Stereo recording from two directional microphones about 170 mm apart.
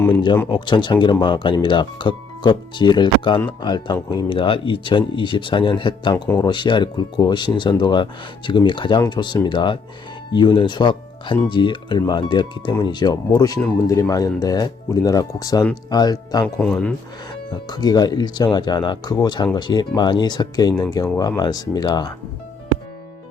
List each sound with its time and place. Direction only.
0.4 s speech: 25° left (ahead or behind)
16.4 s speech: 5° left (ahead or behind)
17.5 s speech: 25° left (ahead or behind)